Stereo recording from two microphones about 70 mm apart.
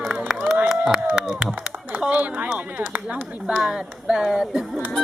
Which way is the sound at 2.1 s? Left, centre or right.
Right.